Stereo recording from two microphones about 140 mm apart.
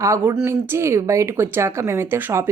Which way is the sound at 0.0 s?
20° right (ahead or behind).